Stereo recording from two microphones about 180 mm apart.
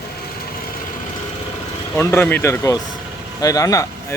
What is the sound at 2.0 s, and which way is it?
Speech, 10° left (ahead or behind).